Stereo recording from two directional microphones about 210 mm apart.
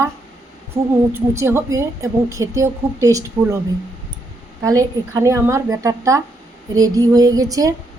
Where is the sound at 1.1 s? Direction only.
10° right (ahead or behind).